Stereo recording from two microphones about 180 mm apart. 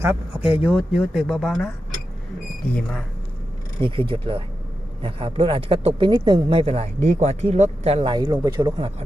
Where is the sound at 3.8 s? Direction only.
30° right (ahead or behind).